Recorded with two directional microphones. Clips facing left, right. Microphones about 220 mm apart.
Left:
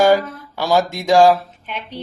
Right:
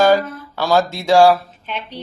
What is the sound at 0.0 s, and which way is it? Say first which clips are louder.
Speech: even; 15° left (ahead or behind).